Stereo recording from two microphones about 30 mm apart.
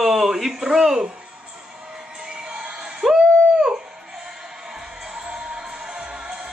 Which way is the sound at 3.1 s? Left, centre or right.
Right.